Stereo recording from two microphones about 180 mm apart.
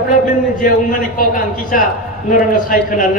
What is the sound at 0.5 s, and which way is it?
A man's voice, 50° left (ahead or behind).